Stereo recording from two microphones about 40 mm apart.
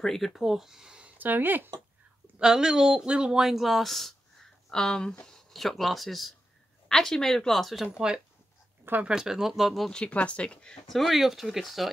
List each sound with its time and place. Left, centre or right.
0.0 s speech: centre
0.4 s speech: centre
1.1 s speech: right
2.3 s a woman's voice: centre
5.5 s speech: centre
6.9 s speech: centre
7.8 s a woman's voice: centre
10.0 s speech: left
10.9 s speech: centre